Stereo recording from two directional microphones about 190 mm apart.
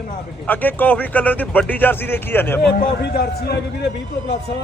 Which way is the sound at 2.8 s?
55° left (ahead or behind).